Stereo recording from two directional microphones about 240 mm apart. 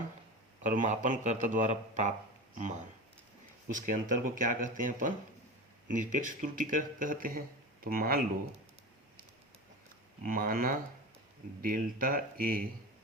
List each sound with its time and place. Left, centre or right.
0.6 s speech: right
10.2 s speech: right